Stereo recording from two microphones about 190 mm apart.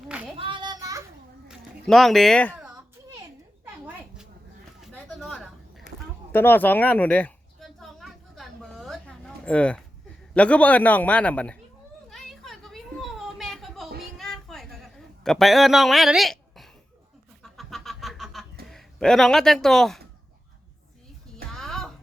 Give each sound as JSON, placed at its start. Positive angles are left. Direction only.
{"t": 0.3, "sound": "child singing", "side_deg": -25}
{"t": 1.5, "sound": "speech", "side_deg": 0}
{"t": 2.6, "sound": "children playing", "side_deg": -15}
{"t": 4.8, "sound": "a sound", "side_deg": 0}
{"t": 10.3, "sound": "a man's voice", "side_deg": 5}
{"t": 12.1, "sound": "a sound", "side_deg": 0}
{"t": 18.7, "sound": "speech", "side_deg": 5}
{"t": 21.5, "sound": "music", "side_deg": 0}